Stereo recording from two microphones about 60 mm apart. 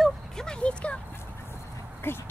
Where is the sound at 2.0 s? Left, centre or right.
Left.